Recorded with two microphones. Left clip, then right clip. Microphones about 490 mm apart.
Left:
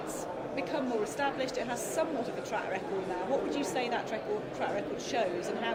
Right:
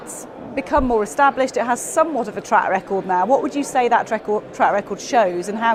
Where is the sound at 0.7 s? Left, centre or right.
Right.